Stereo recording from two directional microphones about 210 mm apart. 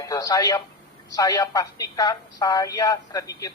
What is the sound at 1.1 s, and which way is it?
Speech, 15° left (ahead or behind).